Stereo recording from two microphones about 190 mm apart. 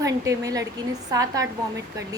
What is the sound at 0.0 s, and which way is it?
A woman's voice, 20° right (ahead or behind).